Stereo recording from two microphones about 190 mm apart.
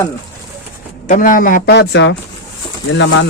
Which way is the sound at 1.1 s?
45° left (ahead or behind).